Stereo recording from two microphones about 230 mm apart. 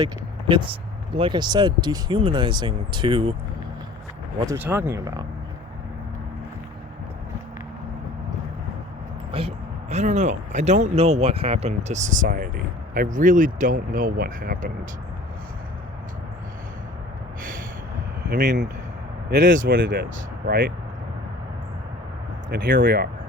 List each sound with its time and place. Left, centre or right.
0.0 s speech: right
4.4 s speech: centre
9.3 s speech: right
18.3 s speech: right
22.4 s speech: right